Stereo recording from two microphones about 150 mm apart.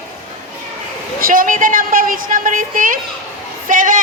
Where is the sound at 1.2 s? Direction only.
70° right (ahead or behind).